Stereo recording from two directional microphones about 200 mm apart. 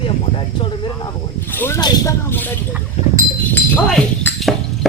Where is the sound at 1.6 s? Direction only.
15° left (ahead or behind).